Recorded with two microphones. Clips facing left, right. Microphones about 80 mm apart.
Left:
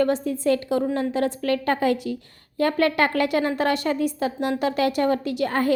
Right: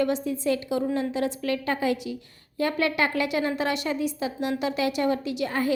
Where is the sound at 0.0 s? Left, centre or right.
Left.